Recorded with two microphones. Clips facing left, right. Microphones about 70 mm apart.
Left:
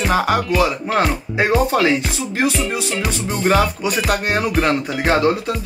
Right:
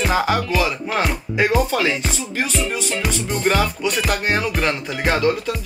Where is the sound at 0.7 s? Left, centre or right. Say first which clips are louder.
Left 3 dB; left.